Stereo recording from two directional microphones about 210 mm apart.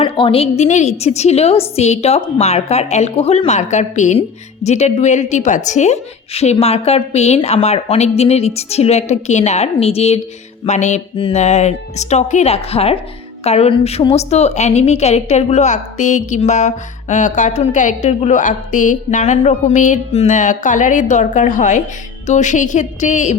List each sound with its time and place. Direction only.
0.0 s a woman's voice: 25° left (ahead or behind)